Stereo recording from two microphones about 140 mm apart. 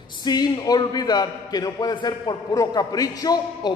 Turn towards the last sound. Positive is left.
turn(degrees=30)  # may be behind; listen again after turning